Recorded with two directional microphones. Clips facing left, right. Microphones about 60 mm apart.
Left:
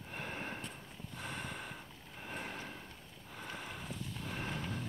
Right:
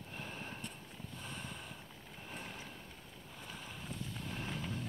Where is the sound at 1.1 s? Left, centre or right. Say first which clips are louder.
Left 5 dB; left.